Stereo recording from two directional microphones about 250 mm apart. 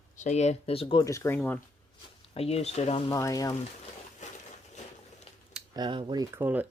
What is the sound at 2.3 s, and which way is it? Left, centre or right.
Speech, left.